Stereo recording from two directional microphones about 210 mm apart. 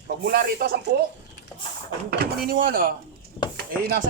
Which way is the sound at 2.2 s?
45° right (ahead or behind).